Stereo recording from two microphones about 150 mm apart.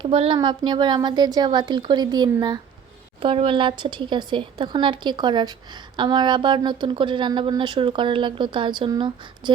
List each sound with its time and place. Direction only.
0.0 s a woman's voice: 35° right (ahead or behind)